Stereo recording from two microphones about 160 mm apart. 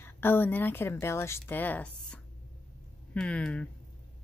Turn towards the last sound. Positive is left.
turn(degrees=5)  # may be behind; listen again after turning